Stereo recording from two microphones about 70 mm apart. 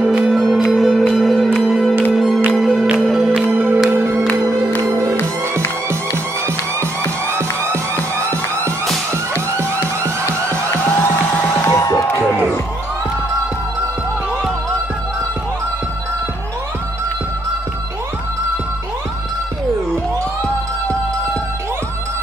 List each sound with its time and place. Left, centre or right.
0.0 s music: centre
3.4 s music: right
7.2 s music: right
10.7 s music: left
11.8 s music: left